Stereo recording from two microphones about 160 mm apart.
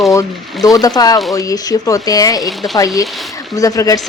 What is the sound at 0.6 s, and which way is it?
A woman's voice, 20° left (ahead or behind).